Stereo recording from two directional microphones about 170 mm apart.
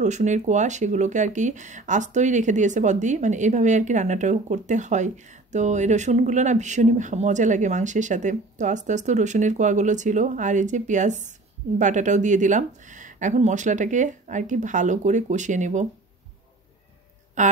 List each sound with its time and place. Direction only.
0.0 s speech: 45° right (ahead or behind)
17.4 s speech: 45° right (ahead or behind)